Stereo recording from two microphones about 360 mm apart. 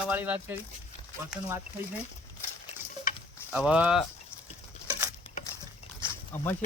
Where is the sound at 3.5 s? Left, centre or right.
Centre.